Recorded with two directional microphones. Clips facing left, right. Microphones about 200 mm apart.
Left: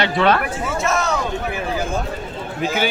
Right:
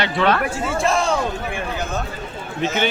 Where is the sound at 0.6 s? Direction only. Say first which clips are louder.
Right 1 dB; 30° right (ahead or behind).